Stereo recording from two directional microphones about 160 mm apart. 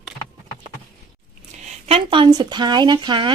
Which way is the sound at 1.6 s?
35° right (ahead or behind).